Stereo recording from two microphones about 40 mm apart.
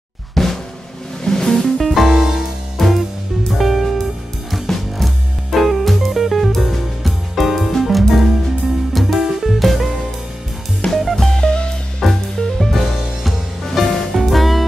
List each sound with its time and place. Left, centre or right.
0.3 s drum: centre
1.2 s music: centre
1.8 s music: centre
2.1 s music: centre
2.8 s music: centre
10.9 s music: centre
11.2 s music: centre
12.0 s music: centre